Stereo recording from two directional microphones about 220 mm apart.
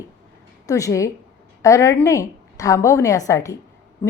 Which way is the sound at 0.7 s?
15° left (ahead or behind).